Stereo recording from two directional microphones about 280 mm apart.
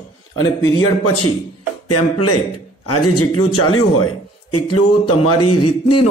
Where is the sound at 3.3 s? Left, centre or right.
Left.